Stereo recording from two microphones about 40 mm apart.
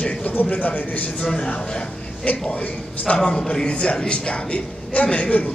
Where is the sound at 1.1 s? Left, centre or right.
Left.